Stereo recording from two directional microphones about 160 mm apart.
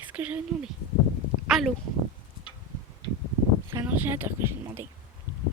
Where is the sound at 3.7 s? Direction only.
15° right (ahead or behind).